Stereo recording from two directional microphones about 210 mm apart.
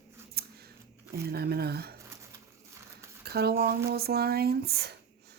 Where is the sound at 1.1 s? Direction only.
50° right (ahead or behind).